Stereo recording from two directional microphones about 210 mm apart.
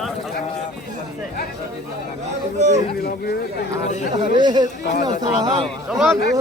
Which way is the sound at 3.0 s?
50° left (ahead or behind).